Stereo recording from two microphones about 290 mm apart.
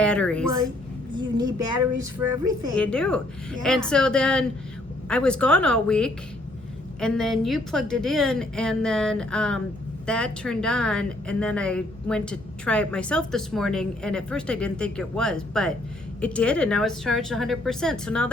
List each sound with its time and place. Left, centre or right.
0.0 s speech: centre
1.1 s speech: centre
1.6 s speech: right
2.7 s a woman's voice: centre